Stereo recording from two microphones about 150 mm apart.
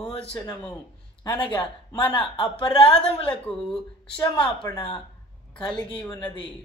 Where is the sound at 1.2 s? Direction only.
30° left (ahead or behind).